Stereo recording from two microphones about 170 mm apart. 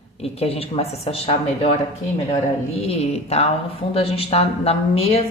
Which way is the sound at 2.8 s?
35° left (ahead or behind).